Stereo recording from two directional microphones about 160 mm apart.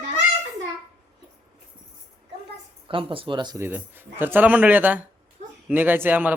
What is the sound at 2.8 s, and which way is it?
Speech, 35° right (ahead or behind).